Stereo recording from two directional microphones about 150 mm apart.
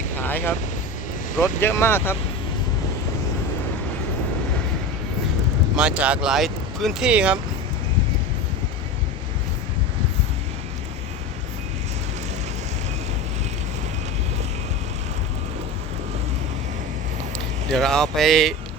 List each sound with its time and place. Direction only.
0.2 s vehicle: 15° left (ahead or behind)
1.4 s speech: 20° left (ahead or behind)
5.7 s speech: 5° right (ahead or behind)
17.7 s speech: centre (ahead or behind)